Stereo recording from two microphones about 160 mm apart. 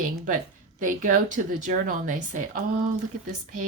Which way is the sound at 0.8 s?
55° right (ahead or behind).